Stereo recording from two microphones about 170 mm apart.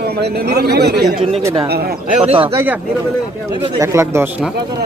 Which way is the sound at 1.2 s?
35° right (ahead or behind).